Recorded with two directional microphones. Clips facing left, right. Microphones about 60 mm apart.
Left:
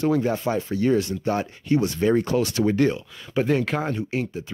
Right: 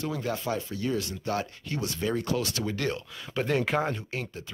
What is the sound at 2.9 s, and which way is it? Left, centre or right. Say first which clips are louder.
Speech: left 5 dB; centre.